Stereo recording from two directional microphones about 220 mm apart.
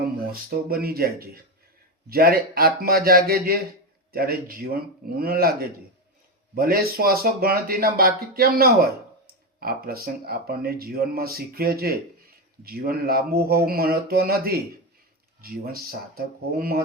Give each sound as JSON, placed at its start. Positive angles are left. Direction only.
{"t": 0.3, "sound": "speech", "side_deg": -45}